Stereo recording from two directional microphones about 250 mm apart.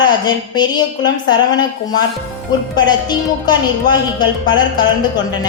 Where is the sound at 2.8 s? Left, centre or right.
Centre.